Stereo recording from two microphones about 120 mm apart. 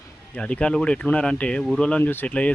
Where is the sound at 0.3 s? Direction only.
10° left (ahead or behind).